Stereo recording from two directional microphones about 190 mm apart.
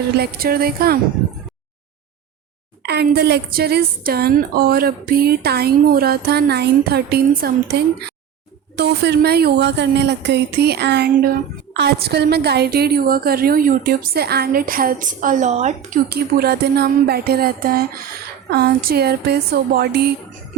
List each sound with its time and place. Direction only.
0.2 s a woman's voice: 50° right (ahead or behind)
2.8 s a woman's voice: 60° right (ahead or behind); by 16.0 s 40° right (ahead or behind)
16.0 s a woman's voice: 55° right (ahead or behind)